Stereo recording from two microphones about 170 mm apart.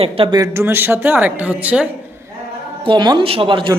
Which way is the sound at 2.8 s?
25° right (ahead or behind).